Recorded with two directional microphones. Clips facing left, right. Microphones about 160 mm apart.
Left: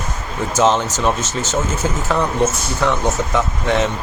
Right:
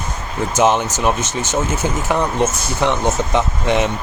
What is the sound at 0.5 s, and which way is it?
Speech, 15° right (ahead or behind).